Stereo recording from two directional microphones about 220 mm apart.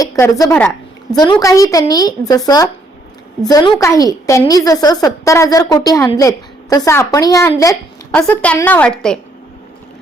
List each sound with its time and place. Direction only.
0.0 s a woman's voice: 15° left (ahead or behind)